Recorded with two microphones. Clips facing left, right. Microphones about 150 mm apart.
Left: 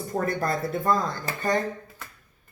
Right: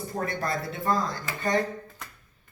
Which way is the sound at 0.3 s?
45° left (ahead or behind).